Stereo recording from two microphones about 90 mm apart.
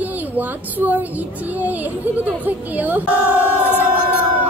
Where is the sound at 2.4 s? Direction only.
20° right (ahead or behind).